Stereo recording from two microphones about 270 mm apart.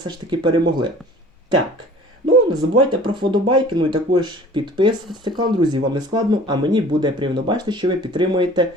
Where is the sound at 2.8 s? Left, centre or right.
Centre.